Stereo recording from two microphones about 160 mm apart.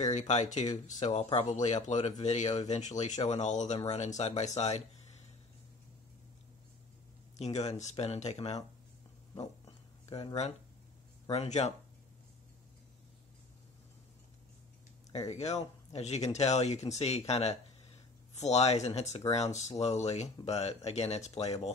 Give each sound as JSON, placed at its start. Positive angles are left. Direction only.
{"t": 0.0, "sound": "speech", "side_deg": 45}
{"t": 7.3, "sound": "speech", "side_deg": 45}
{"t": 10.1, "sound": "speech", "side_deg": 40}
{"t": 15.2, "sound": "speech", "side_deg": 45}
{"t": 19.2, "sound": "speech", "side_deg": 20}
{"t": 19.8, "sound": "speech", "side_deg": 45}